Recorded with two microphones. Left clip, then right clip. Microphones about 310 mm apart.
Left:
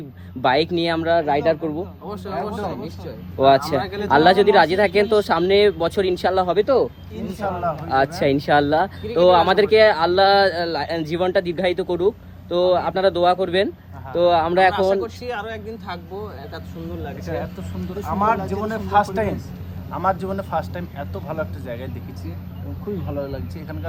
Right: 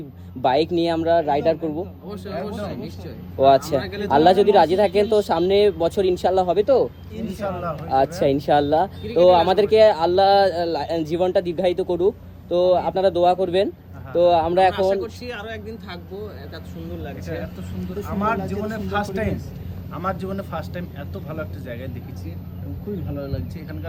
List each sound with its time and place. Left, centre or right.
0.4 s speech: left
2.0 s speech: centre
3.4 s speech: centre
3.8 s speech: centre
4.1 s speech: left
14.8 s speech: centre
17.0 s speech: centre